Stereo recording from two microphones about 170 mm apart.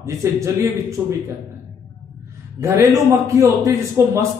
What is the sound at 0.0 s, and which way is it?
Speech, 15° right (ahead or behind).